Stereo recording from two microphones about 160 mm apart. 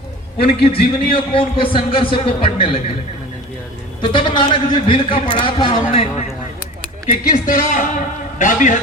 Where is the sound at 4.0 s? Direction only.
30° left (ahead or behind).